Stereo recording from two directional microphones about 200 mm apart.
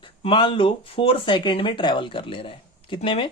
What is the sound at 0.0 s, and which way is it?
Speech, 25° left (ahead or behind).